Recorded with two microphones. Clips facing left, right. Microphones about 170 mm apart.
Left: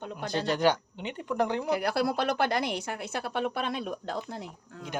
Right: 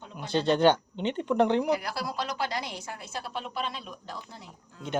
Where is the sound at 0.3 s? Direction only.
30° right (ahead or behind).